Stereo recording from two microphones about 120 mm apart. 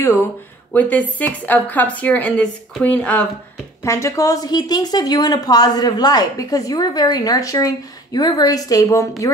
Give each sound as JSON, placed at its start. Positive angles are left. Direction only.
{"t": 0.7, "sound": "a woman's voice", "side_deg": 15}
{"t": 3.8, "sound": "a woman's voice", "side_deg": 25}
{"t": 9.2, "sound": "music", "side_deg": 25}